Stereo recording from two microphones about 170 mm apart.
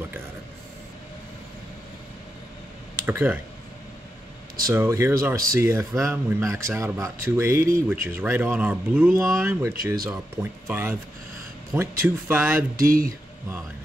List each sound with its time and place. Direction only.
3.1 s speech: 15° right (ahead or behind)
4.6 s speech: 15° right (ahead or behind)
12.8 s speech: 60° right (ahead or behind)